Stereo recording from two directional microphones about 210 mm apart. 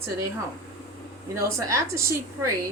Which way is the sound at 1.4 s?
15° right (ahead or behind).